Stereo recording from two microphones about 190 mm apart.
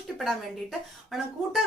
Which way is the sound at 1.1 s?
Centre (ahead or behind).